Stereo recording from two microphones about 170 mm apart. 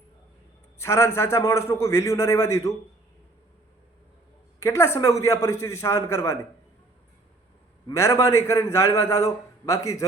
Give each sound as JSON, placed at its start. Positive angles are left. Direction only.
{"t": 0.8, "sound": "a man's voice", "side_deg": 15}
{"t": 4.6, "sound": "a man's voice", "side_deg": 15}
{"t": 7.9, "sound": "a man's voice", "side_deg": 20}